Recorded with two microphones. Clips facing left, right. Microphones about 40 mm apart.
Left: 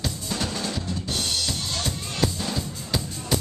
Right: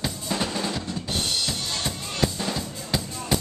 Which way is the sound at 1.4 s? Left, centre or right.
Centre.